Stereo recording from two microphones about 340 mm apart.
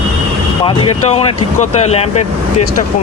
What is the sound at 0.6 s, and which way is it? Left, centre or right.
Speech, centre.